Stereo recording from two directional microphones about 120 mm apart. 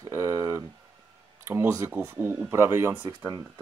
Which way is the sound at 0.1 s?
25° right (ahead or behind).